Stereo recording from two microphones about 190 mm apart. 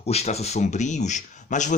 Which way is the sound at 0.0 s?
35° left (ahead or behind).